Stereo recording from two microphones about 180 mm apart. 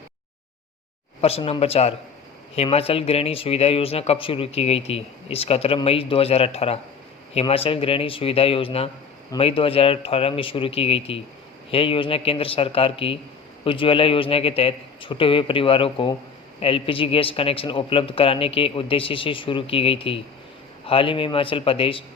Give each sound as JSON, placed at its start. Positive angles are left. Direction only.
{"t": 1.2, "sound": "a man's voice", "side_deg": 35}